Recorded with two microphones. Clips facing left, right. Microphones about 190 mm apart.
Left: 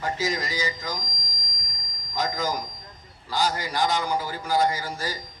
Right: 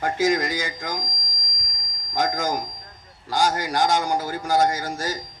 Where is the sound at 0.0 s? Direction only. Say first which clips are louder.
Right 6 dB; 50° right (ahead or behind).